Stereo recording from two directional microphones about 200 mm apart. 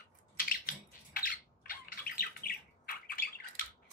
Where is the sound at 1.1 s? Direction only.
45° left (ahead or behind).